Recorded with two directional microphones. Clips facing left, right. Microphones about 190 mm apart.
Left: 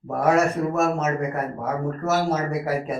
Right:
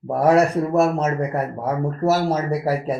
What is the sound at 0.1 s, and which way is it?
A man's voice, 35° right (ahead or behind).